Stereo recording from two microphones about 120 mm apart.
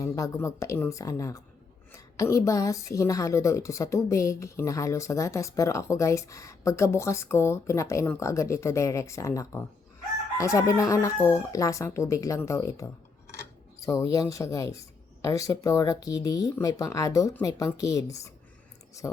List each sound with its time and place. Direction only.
0.0 s a woman's voice: 25° left (ahead or behind)